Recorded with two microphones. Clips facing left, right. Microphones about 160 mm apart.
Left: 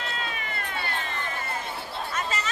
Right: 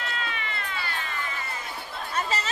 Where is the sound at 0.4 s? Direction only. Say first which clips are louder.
Left 1 dB; 50° left (ahead or behind).